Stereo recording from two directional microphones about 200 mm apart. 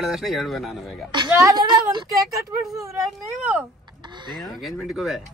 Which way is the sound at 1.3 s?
20° right (ahead or behind).